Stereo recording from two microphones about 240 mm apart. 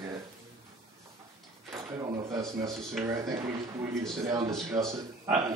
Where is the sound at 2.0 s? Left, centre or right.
Centre.